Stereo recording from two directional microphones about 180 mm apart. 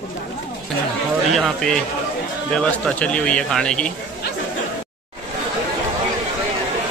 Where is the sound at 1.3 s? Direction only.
Centre (ahead or behind).